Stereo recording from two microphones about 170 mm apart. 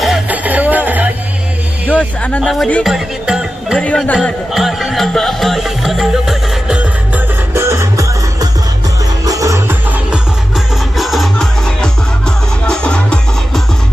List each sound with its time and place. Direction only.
0.0 s music: 5° right (ahead or behind)
1.9 s speech: 10° left (ahead or behind)
3.8 s speech: 10° left (ahead or behind)
4.5 s music: centre (ahead or behind)
7.5 s music: 15° right (ahead or behind)
10.9 s music: centre (ahead or behind)